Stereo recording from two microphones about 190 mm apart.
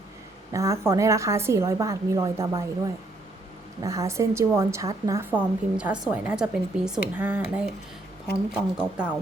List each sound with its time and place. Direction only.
0.5 s a woman's voice: 15° right (ahead or behind)
5.7 s a woman's voice: 5° right (ahead or behind)